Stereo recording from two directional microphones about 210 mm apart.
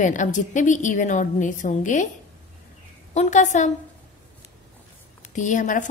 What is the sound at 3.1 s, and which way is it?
Speech, 35° left (ahead or behind).